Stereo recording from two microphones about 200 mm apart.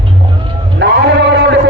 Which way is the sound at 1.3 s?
60° right (ahead or behind).